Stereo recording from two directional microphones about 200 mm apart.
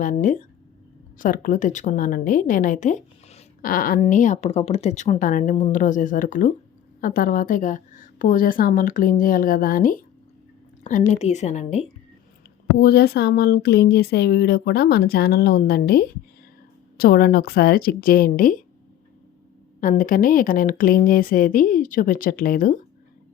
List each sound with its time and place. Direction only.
0.0 s a woman's voice: 40° left (ahead or behind)
11.1 s a woman's voice: 35° left (ahead or behind)
12.7 s speech: 55° left (ahead or behind)
19.8 s speech: 40° left (ahead or behind)